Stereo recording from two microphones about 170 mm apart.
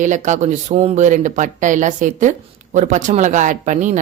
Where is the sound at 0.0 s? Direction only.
45° right (ahead or behind).